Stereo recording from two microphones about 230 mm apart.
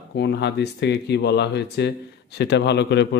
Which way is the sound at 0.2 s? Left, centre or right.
Left.